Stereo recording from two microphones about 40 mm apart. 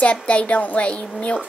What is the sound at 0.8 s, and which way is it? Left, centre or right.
Speech, left.